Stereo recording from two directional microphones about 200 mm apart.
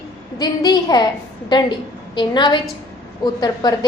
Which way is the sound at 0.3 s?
20° left (ahead or behind).